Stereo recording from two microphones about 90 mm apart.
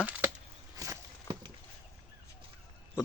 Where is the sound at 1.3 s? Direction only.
30° left (ahead or behind).